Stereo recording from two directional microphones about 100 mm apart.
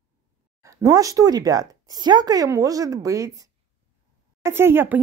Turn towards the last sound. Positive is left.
turn(degrees=-20)  # may be behind; listen again after turning